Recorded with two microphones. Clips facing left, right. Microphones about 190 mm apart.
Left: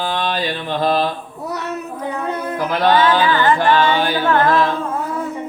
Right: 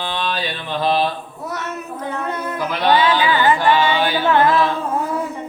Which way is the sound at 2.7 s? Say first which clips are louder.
Left 2 dB; 50° left (ahead or behind).